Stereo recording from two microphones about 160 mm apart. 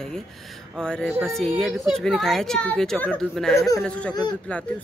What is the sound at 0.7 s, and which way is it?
Speech, 5° left (ahead or behind).